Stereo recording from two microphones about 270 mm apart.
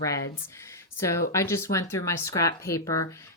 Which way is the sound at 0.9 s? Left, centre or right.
Centre.